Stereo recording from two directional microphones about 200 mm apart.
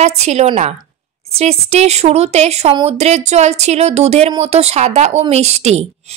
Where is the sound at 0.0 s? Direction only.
35° right (ahead or behind).